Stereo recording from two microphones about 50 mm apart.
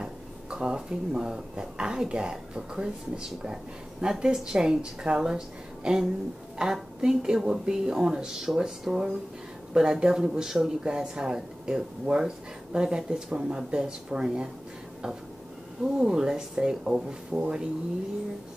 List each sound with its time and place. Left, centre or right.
0.0 s speech: centre
15.8 s speech: centre